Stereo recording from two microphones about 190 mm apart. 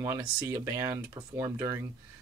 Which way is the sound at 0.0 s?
15° right (ahead or behind).